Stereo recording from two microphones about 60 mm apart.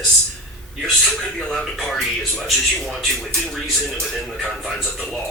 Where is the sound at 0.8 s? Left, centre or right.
Centre.